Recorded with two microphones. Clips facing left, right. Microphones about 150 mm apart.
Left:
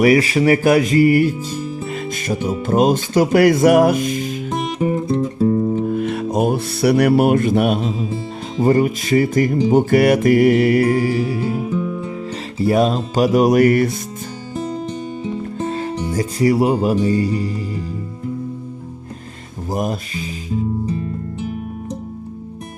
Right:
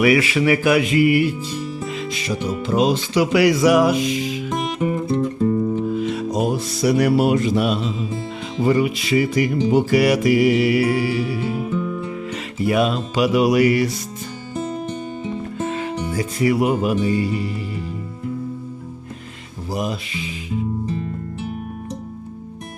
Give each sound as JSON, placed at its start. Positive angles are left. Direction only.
{"t": 0.0, "sound": "music", "side_deg": 40}
{"t": 4.4, "sound": "music", "side_deg": 35}
{"t": 5.7, "sound": "speech", "side_deg": 50}
{"t": 8.5, "sound": "music", "side_deg": 45}
{"t": 15.5, "sound": "speech", "side_deg": 35}
{"t": 19.7, "sound": "speech", "side_deg": 50}